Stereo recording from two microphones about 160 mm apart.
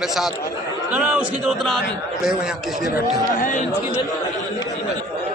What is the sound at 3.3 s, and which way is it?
Speech, 55° left (ahead or behind).